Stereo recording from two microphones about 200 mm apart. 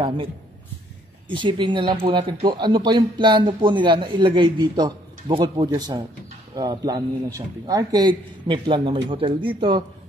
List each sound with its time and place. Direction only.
1.3 s speech: 25° right (ahead or behind)